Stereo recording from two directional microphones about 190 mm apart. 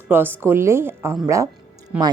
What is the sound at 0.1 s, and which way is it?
Speech, 10° right (ahead or behind).